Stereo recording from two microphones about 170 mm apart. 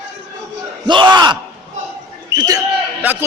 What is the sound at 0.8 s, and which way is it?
Speech, 25° right (ahead or behind).